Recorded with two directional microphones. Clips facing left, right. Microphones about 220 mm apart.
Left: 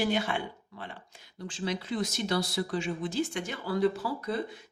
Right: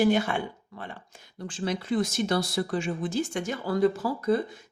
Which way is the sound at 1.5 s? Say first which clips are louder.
Right 4 dB; 50° right (ahead or behind).